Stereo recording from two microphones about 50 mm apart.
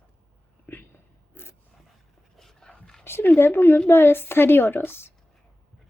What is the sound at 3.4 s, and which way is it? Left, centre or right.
A woman's voice, left.